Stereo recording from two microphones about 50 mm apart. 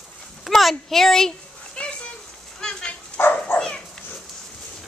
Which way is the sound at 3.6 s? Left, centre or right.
Centre.